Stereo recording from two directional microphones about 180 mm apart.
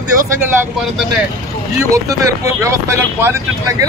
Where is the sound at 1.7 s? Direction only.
15° right (ahead or behind).